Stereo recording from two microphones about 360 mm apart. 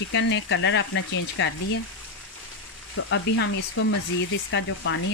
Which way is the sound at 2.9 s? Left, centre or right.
Left.